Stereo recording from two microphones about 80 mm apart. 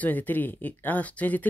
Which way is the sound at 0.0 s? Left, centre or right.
Left.